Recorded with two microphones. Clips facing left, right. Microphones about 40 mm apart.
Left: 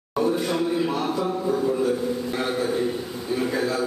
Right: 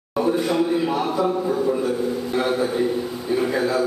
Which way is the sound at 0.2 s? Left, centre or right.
Centre.